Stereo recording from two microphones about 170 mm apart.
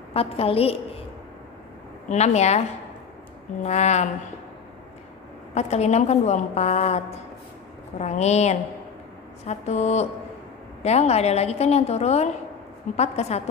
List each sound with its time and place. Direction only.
0.1 s a woman's voice: 35° left (ahead or behind)
2.0 s a woman's voice: 40° left (ahead or behind)
3.6 s speech: 40° left (ahead or behind)
5.5 s a woman's voice: 40° left (ahead or behind)